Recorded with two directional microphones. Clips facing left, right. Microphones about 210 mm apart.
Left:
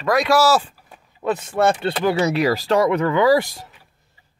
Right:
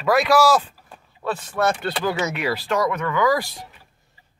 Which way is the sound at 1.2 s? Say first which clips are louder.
Left 4 dB; 20° left (ahead or behind).